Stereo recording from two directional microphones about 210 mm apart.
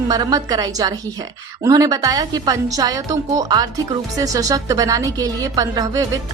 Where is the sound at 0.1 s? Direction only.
15° right (ahead or behind).